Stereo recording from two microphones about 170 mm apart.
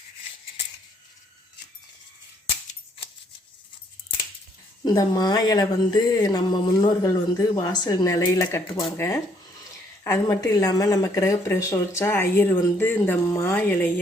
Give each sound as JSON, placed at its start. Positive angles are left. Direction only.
{"t": 4.8, "sound": "speech", "side_deg": 25}